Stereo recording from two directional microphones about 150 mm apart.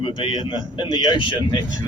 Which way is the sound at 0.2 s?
35° left (ahead or behind).